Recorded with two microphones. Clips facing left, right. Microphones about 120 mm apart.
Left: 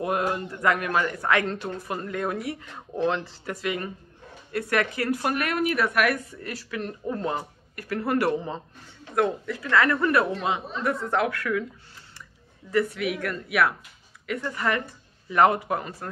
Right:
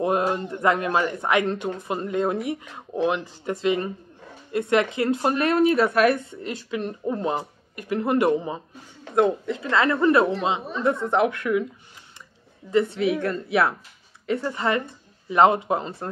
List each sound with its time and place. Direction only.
0.0 s speech: 25° right (ahead or behind)
12.7 s speech: 25° right (ahead or behind)